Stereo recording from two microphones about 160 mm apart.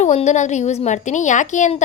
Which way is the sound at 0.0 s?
45° left (ahead or behind).